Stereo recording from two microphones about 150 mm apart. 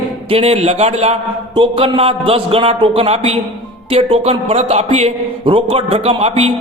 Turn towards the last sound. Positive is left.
turn(degrees=-45)  # may be behind; listen again after turning